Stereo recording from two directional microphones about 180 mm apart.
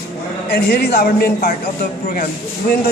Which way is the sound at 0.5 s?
65° left (ahead or behind).